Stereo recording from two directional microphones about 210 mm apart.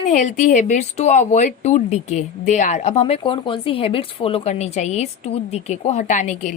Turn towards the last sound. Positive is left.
turn(degrees=35)  # may be behind; listen again after turning